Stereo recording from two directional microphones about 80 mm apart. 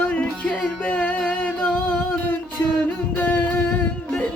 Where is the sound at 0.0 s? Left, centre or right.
Centre.